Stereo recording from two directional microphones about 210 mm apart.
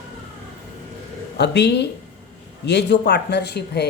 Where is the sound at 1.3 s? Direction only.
55° left (ahead or behind).